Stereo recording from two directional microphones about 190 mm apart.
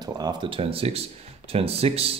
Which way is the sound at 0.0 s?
20° right (ahead or behind).